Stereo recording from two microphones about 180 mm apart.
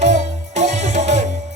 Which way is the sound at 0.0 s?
40° right (ahead or behind).